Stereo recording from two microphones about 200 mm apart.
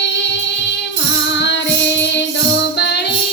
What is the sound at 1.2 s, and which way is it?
Music, 60° left (ahead or behind).